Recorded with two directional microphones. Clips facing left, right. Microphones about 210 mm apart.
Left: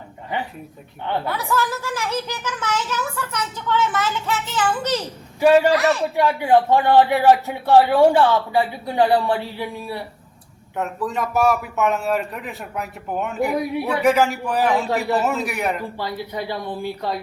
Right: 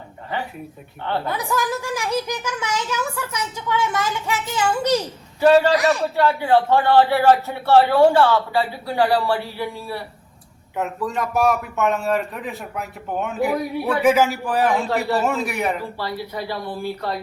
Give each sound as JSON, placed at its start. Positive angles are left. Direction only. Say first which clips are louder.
{"t": 1.3, "sound": "a child's voice", "louder": "even", "side_deg": -15}
{"t": 5.4, "sound": "speech", "louder": "even", "side_deg": 10}
{"t": 5.7, "sound": "a child's voice", "louder": "even", "side_deg": -15}
{"t": 6.1, "sound": "speech", "louder": "left 2 dB", "side_deg": 15}
{"t": 10.8, "sound": "speech", "louder": "even", "side_deg": 0}
{"t": 16.0, "sound": "speech", "louder": "even", "side_deg": 20}